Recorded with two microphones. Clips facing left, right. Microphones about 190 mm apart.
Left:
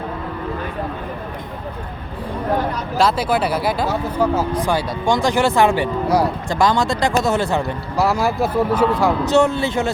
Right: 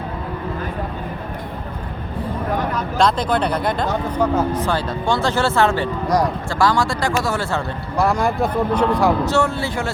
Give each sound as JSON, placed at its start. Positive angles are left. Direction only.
{"t": 3.0, "sound": "speech", "side_deg": 5}
{"t": 7.9, "sound": "speech", "side_deg": 5}
{"t": 9.2, "sound": "speech", "side_deg": 20}